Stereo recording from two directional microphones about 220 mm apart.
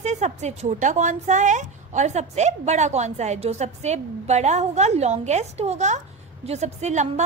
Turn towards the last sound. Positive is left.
turn(degrees=-30)  # may be behind; listen again after turning